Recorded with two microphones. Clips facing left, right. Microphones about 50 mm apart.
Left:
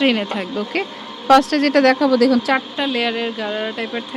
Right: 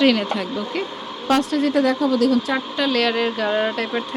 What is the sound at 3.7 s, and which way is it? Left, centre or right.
Speech, centre.